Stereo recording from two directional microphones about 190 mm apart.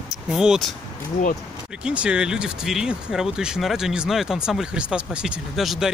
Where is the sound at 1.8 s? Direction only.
5° right (ahead or behind).